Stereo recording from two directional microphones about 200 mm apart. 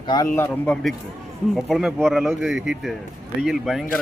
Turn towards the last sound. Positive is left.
turn(degrees=0)  # may be behind; listen again after turning